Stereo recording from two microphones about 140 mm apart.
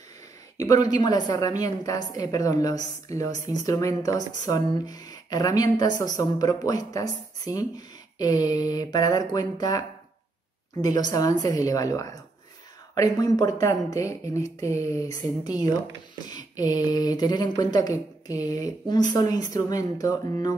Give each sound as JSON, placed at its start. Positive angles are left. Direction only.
{"t": 0.6, "sound": "speech", "side_deg": 25}